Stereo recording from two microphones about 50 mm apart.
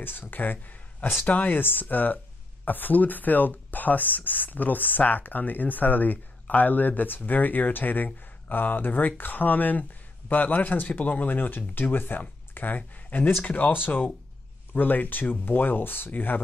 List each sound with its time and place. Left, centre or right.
0.3 s speech: left